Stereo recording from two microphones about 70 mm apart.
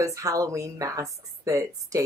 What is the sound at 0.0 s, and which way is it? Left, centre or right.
Speech, right.